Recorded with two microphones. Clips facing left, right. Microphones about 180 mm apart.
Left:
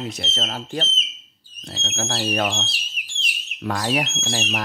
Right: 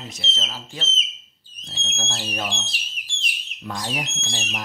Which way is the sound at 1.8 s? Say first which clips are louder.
Left 7 dB; 65° left (ahead or behind).